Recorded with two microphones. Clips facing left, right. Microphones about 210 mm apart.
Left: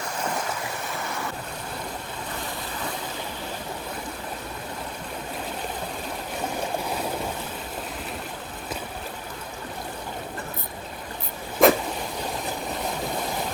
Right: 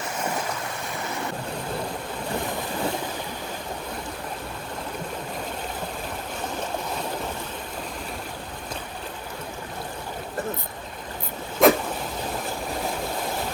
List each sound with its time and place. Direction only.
11.6 s vehicle: centre (ahead or behind)